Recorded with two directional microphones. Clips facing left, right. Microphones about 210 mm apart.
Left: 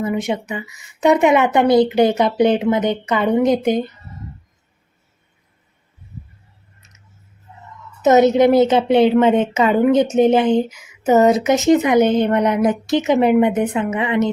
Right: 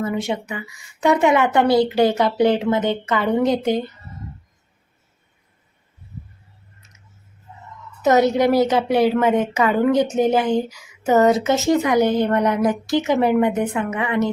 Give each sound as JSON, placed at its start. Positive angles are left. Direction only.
{"t": 0.0, "sound": "a woman's voice", "side_deg": 20}
{"t": 8.0, "sound": "a woman's voice", "side_deg": 20}